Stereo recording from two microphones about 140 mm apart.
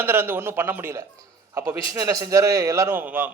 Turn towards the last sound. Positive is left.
turn(degrees=-10)  # may be behind; listen again after turning